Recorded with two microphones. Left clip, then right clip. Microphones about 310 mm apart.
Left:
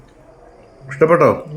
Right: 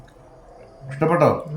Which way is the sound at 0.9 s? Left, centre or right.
Centre.